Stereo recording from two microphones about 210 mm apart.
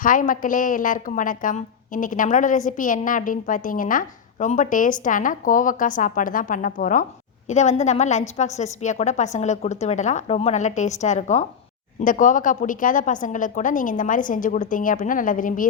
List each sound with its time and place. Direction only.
0.0 s a woman's voice: 40° left (ahead or behind)